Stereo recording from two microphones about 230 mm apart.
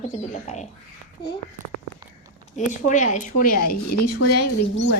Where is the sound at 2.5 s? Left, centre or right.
Left.